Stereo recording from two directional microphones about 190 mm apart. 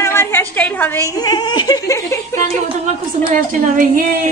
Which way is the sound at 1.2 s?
20° left (ahead or behind).